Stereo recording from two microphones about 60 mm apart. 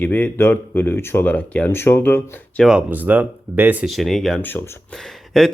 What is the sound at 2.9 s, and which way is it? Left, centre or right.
Speech, right.